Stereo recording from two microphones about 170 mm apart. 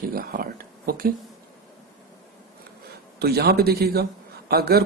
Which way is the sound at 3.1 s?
70° right (ahead or behind).